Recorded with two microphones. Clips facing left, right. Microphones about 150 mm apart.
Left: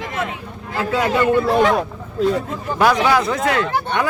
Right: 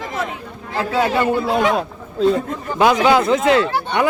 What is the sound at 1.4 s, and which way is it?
Speech, 5° right (ahead or behind).